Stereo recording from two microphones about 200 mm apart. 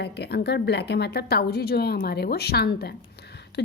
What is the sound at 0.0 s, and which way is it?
A woman's voice, 55° left (ahead or behind).